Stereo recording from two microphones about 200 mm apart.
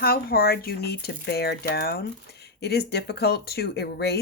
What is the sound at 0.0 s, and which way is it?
A woman's voice, 50° left (ahead or behind).